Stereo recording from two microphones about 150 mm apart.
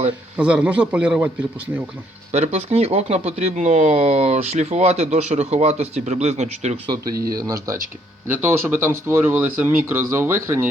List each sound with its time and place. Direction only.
0.3 s speech: 5° right (ahead or behind)
2.3 s speech: 45° right (ahead or behind)
7.4 s speech: 20° right (ahead or behind)